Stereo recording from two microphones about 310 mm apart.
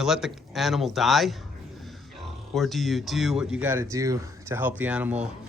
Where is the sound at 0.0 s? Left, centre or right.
Centre.